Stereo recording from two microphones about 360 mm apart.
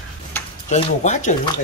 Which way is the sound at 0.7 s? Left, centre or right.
Centre.